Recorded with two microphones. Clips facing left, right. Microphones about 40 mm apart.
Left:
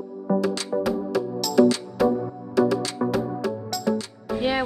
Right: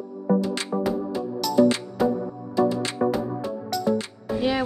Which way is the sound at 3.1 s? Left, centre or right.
Left.